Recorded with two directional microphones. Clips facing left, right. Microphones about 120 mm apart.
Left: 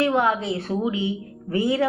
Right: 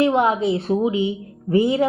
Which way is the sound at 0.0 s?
20° right (ahead or behind).